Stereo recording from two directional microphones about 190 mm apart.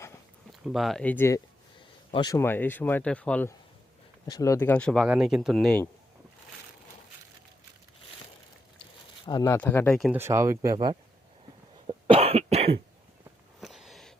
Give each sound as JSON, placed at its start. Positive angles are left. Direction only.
{"t": 0.6, "sound": "speech", "side_deg": 0}
{"t": 4.3, "sound": "speech", "side_deg": 15}
{"t": 9.2, "sound": "speech", "side_deg": 20}
{"t": 10.1, "sound": "speech", "side_deg": -15}
{"t": 11.9, "sound": "cough", "side_deg": -30}
{"t": 13.6, "sound": "a sound", "side_deg": 0}